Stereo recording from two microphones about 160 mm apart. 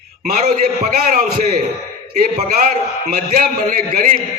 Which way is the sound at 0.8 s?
60° right (ahead or behind).